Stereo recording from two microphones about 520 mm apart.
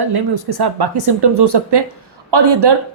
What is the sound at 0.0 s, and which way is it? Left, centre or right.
A woman's voice, right.